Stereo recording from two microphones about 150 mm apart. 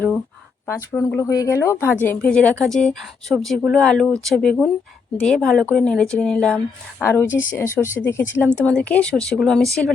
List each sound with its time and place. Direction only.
0.7 s a woman's voice: 20° left (ahead or behind)